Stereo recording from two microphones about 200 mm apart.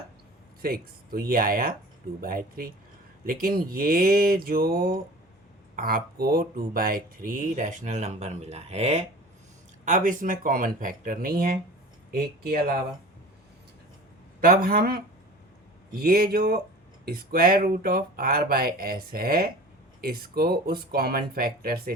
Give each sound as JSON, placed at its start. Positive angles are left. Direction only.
{"t": 0.6, "sound": "speech", "side_deg": -50}
{"t": 14.4, "sound": "speech", "side_deg": -45}